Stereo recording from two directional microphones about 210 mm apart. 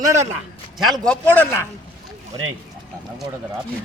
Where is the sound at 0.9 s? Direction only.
5° left (ahead or behind).